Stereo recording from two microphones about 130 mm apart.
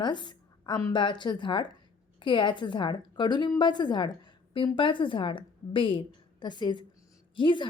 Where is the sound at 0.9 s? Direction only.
35° left (ahead or behind).